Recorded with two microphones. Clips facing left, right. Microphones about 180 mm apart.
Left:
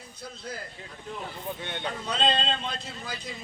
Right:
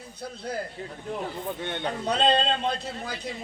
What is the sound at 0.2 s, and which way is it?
Speech, 60° right (ahead or behind).